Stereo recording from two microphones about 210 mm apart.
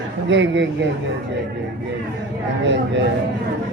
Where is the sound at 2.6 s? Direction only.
60° right (ahead or behind).